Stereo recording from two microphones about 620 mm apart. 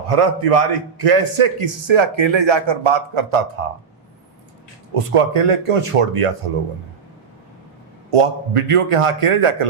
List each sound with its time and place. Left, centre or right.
0.1 s a man's voice: right
4.9 s a man's voice: right
8.1 s a man's voice: right